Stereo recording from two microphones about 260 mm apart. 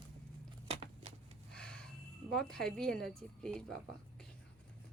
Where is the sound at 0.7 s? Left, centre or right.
Right.